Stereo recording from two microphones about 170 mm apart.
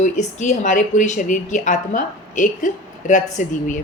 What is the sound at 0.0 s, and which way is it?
Speech, 45° left (ahead or behind).